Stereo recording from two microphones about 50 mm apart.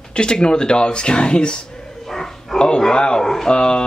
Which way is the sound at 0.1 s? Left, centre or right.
Centre.